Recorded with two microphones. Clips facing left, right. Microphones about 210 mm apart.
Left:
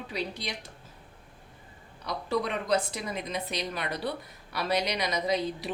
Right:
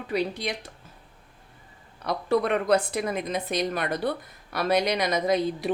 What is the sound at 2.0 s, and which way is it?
A woman's voice, 60° right (ahead or behind).